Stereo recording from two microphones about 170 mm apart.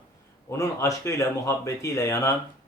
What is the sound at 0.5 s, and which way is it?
Speech, 15° left (ahead or behind).